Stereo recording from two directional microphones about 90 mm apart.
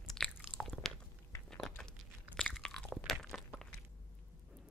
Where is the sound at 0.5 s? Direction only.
5° left (ahead or behind).